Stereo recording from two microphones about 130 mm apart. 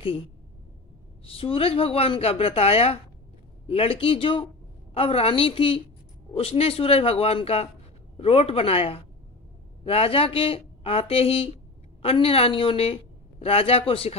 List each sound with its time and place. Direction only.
1.2 s a woman's voice: 45° left (ahead or behind)